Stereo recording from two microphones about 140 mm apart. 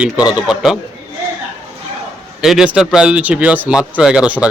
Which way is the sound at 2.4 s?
5° right (ahead or behind).